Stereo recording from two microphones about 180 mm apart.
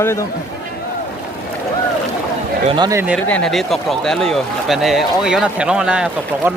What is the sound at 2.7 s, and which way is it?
Speech, 25° right (ahead or behind).